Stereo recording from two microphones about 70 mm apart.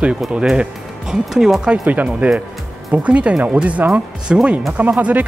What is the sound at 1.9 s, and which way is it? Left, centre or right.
Speech, right.